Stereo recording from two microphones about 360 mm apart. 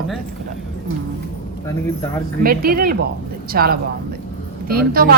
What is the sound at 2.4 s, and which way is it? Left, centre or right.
A woman's voice, right.